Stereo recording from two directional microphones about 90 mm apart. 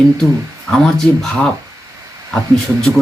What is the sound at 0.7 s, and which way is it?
Speech, 5° left (ahead or behind).